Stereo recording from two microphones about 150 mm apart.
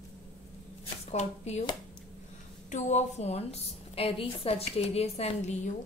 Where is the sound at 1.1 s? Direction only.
50° left (ahead or behind).